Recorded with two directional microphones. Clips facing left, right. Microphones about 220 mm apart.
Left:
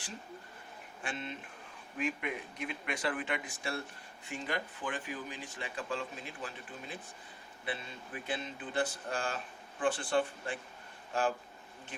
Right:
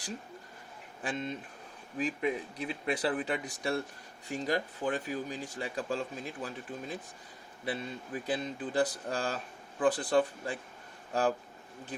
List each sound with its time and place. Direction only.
1.0 s speech: 40° right (ahead or behind)